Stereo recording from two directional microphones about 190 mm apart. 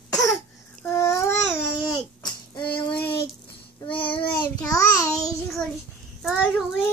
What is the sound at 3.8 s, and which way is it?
Child singing, 25° left (ahead or behind).